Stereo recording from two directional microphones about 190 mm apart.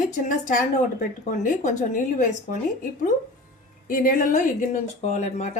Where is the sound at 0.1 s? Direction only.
45° left (ahead or behind).